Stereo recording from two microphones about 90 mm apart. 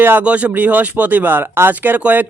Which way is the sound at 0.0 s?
25° right (ahead or behind).